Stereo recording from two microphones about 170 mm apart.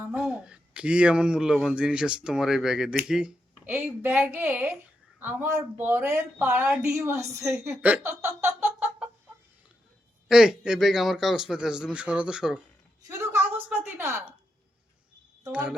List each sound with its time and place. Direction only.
0.0 s a man's voice: 5° right (ahead or behind)
10.2 s a man's voice: 5° right (ahead or behind)
13.1 s a woman's voice: 15° right (ahead or behind)
15.4 s speech: 5° right (ahead or behind)